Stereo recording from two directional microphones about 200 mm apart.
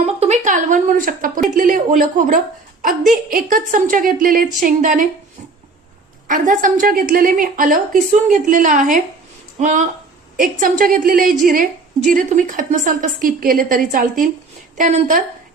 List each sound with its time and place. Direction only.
0.0 s a woman's voice: 35° right (ahead or behind)
6.2 s a woman's voice: 40° right (ahead or behind)